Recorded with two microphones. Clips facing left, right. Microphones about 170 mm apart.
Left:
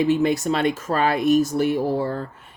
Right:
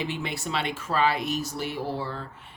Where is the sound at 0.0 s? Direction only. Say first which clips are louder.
Left 13 dB; 45° left (ahead or behind).